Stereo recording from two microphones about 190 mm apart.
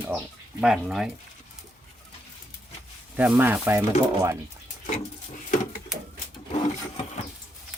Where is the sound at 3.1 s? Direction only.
5° right (ahead or behind).